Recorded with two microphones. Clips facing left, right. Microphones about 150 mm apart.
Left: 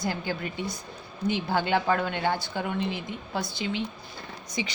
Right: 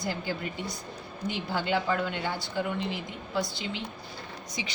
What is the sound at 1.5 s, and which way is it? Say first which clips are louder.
Speech: left 2 dB; 60° left (ahead or behind).